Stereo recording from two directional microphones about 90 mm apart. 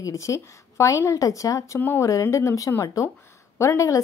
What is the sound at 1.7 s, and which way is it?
Speech, 25° left (ahead or behind).